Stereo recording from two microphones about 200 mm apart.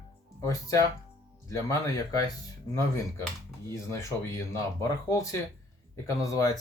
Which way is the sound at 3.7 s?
15° left (ahead or behind).